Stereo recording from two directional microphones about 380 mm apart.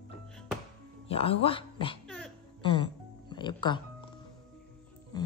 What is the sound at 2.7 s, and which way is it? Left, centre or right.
Music, centre.